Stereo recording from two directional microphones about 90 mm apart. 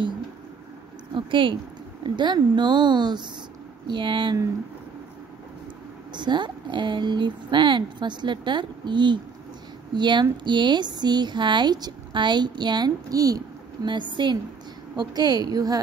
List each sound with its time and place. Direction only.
1.1 s speech: 70° right (ahead or behind)
2.0 s speech: 55° right (ahead or behind)
6.1 s speech: 55° right (ahead or behind)
13.8 s speech: 55° right (ahead or behind)
15.0 s a woman's voice: 45° right (ahead or behind)